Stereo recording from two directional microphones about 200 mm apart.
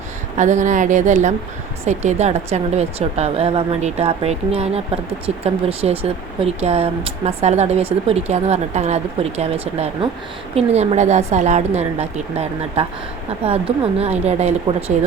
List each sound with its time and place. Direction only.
0.3 s speech: 35° right (ahead or behind)